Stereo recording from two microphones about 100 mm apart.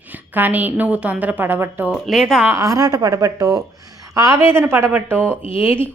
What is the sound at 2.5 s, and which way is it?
A woman's voice, 35° right (ahead or behind).